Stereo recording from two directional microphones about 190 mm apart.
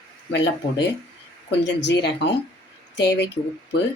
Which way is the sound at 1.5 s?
65° left (ahead or behind).